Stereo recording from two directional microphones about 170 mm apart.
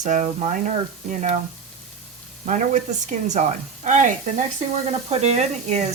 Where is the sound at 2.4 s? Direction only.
45° right (ahead or behind).